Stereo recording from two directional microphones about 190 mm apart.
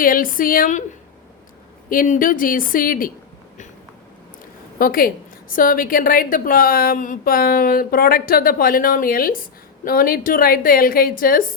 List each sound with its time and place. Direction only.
0.0 s a woman's voice: 45° left (ahead or behind)
1.9 s a woman's voice: 45° left (ahead or behind)
4.8 s a woman's voice: 50° left (ahead or behind)